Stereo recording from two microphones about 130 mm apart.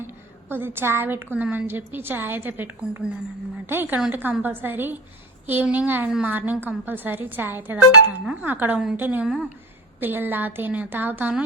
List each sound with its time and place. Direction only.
0.0 s a woman's voice: 15° right (ahead or behind)